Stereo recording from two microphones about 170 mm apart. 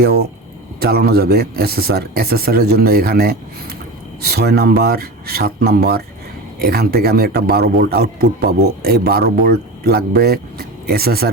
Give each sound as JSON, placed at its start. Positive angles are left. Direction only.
{"t": 0.8, "sound": "a man's voice", "side_deg": -65}